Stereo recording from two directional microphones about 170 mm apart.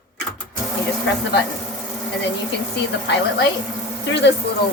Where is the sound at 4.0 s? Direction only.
90° left.